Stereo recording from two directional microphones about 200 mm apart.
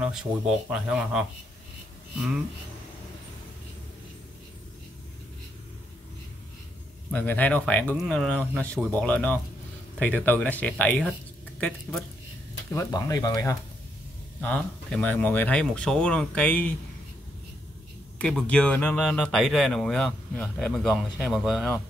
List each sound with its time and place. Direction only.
0.0 s speech: 5° right (ahead or behind)
7.1 s speech: 10° left (ahead or behind)
12.7 s speech: 15° left (ahead or behind)
14.4 s speech: 5° left (ahead or behind)
18.2 s speech: 5° left (ahead or behind)